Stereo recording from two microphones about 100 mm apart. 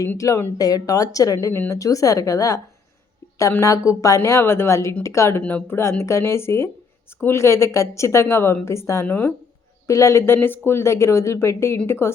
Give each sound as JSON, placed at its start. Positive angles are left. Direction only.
{"t": 0.2, "sound": "a woman's voice", "side_deg": 35}
{"t": 1.5, "sound": "a woman's voice", "side_deg": 20}
{"t": 1.8, "sound": "a woman's voice", "side_deg": 35}
{"t": 3.6, "sound": "a woman's voice", "side_deg": 35}
{"t": 5.4, "sound": "a woman's voice", "side_deg": 15}